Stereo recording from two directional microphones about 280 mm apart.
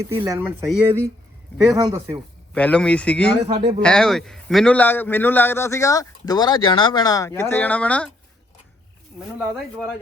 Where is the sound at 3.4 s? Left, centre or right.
Centre.